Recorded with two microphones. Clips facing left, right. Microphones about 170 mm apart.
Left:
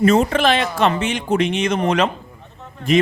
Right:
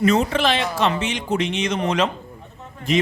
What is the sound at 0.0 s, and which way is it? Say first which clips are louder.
A man's voice: left 3 dB; 50° left (ahead or behind).